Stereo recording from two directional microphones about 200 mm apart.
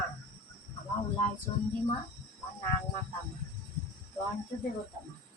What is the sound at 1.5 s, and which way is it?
Speech, 20° left (ahead or behind).